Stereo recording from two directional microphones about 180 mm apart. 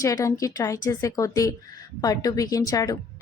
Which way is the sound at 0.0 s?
20° left (ahead or behind).